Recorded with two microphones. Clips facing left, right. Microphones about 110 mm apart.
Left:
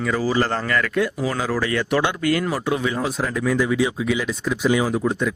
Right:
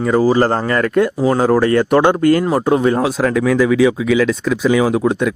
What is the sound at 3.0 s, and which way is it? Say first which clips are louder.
Speech: right 8 dB; 80° right.